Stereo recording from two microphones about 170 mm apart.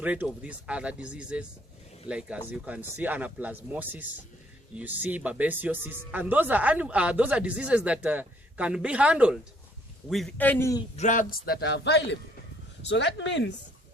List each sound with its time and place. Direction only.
0.0 s a man's voice: 10° right (ahead or behind); by 10.8 s 15° left (ahead or behind)
10.9 s a man's voice: 45° left (ahead or behind); by 13.5 s 90° left